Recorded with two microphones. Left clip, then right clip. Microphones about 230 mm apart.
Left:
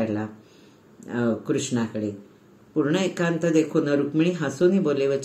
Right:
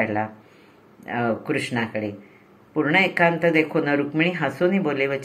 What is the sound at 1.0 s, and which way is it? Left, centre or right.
Speech, right.